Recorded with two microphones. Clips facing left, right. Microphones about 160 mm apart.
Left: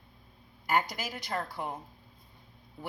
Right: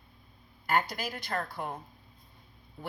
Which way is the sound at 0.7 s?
15° left (ahead or behind).